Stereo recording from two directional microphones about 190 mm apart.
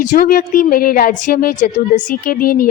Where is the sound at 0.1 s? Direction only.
50° left (ahead or behind).